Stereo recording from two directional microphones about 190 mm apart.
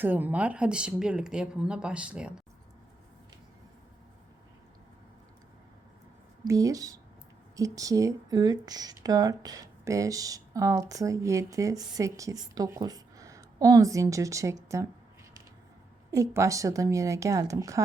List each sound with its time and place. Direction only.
0.0 s speech: 10° right (ahead or behind)
6.4 s speech: 20° right (ahead or behind)
16.1 s speech: 15° right (ahead or behind)